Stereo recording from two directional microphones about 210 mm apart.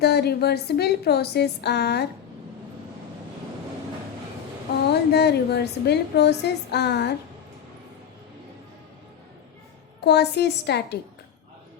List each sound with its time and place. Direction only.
0.0 s a woman's voice: 50° left (ahead or behind)
4.9 s a woman's voice: 50° left (ahead or behind)
10.0 s a woman's voice: 50° left (ahead or behind)